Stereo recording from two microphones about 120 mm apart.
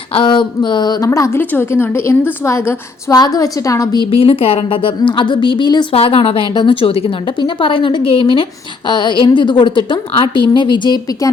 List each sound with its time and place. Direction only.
0.1 s a woman's voice: 45° left (ahead or behind); by 4.0 s 30° left (ahead or behind)
4.0 s a woman's voice: 50° left (ahead or behind)